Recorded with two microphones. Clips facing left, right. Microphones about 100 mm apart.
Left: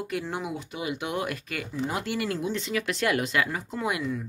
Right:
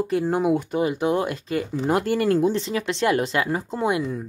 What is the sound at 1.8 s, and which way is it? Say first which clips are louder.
A woman's voice: right 8 dB; 45° right (ahead or behind).